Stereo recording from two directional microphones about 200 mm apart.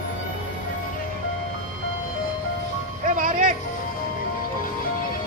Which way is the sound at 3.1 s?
40° right (ahead or behind).